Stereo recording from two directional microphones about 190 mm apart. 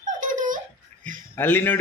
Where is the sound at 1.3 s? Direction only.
10° left (ahead or behind).